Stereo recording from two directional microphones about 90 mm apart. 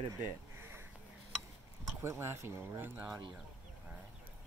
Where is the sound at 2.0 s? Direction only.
30° right (ahead or behind).